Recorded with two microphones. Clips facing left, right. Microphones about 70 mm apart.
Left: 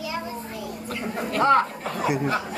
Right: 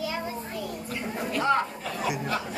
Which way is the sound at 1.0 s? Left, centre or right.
Left.